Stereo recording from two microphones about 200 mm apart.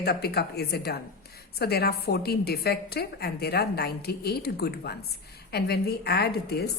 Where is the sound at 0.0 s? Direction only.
55° left (ahead or behind).